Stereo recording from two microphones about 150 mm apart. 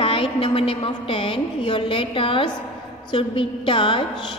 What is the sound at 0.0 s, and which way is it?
A woman's voice, 35° left (ahead or behind).